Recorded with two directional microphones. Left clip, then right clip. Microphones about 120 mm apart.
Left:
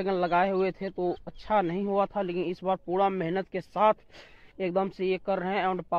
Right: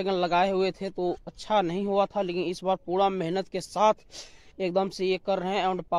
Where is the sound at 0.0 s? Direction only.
40° right (ahead or behind).